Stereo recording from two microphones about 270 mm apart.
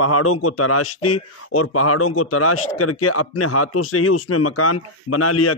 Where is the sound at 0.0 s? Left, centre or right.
Left.